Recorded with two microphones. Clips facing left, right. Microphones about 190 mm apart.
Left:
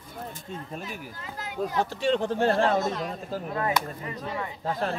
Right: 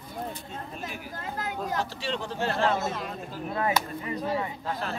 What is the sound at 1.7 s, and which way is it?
Speech, 50° left (ahead or behind).